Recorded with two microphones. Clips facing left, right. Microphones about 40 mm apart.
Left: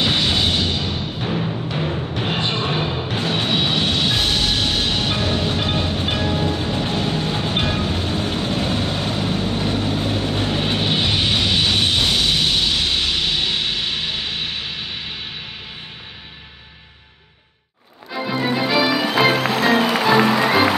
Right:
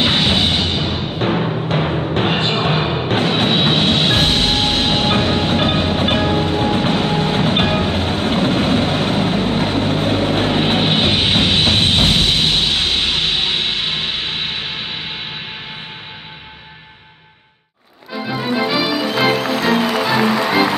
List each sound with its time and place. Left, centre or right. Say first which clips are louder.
0.0 s music: right 3 dB; right
1.2 s timpani: right 6 dB; right
18.2 s music: right 1 dB; centre